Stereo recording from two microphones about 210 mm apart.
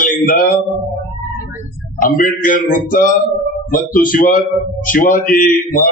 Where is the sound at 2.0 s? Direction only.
40° left (ahead or behind).